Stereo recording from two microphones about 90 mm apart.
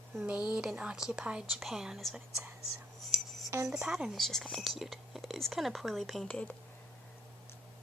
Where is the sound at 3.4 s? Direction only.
35° right (ahead or behind).